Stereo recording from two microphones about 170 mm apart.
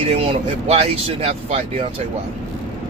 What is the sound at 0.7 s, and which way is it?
Speech, 35° right (ahead or behind).